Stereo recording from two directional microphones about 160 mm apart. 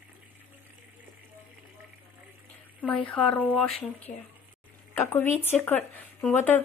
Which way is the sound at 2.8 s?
10° left (ahead or behind).